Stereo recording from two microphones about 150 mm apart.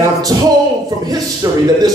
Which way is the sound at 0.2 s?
25° right (ahead or behind).